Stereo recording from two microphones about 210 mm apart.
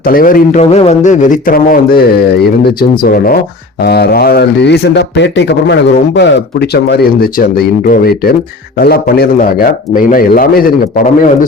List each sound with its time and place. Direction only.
0.0 s speech: 40° left (ahead or behind)
0.6 s speech: 30° left (ahead or behind)